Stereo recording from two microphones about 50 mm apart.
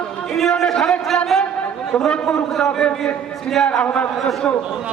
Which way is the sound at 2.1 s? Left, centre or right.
Centre.